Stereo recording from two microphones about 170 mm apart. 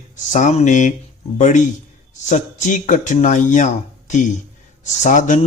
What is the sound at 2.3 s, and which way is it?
Speech, 45° left (ahead or behind).